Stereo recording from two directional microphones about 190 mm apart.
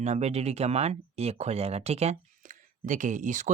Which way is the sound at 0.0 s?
35° right (ahead or behind).